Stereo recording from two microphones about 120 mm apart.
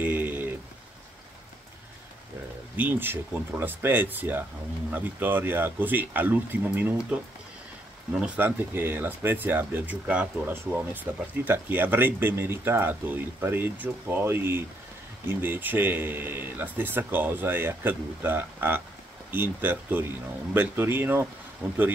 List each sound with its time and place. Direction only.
0.0 s a sound: 15° right (ahead or behind)
2.7 s speech: 15° right (ahead or behind)
8.4 s speech: 15° right (ahead or behind)